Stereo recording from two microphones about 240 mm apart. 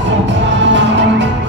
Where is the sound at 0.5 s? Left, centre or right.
Right.